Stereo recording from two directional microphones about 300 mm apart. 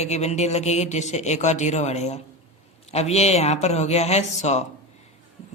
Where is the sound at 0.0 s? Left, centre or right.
Left.